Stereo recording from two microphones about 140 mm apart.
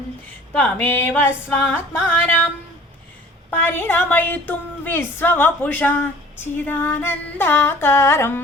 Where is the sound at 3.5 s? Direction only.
15° left (ahead or behind).